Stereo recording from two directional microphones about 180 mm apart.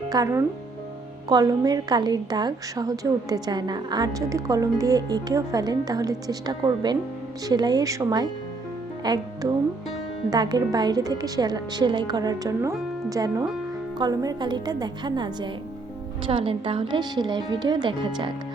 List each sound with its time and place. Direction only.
0.1 s a woman's voice: 20° right (ahead or behind)